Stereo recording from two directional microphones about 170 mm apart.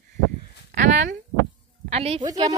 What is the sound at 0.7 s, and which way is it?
Speech, 50° right (ahead or behind).